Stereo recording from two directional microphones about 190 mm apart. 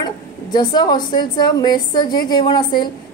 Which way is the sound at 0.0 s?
20° left (ahead or behind).